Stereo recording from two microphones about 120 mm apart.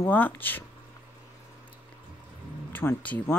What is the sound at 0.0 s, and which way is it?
Speech, 15° left (ahead or behind).